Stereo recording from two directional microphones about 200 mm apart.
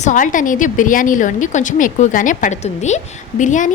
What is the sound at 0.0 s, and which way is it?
A woman's voice, 40° left (ahead or behind).